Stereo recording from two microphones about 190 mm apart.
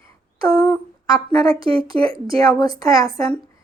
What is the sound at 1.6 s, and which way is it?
Speech, 30° right (ahead or behind).